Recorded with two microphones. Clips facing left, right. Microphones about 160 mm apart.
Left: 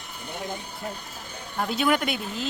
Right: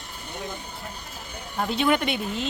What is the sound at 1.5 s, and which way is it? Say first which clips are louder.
Speech: right 1 dB; centre (ahead or behind).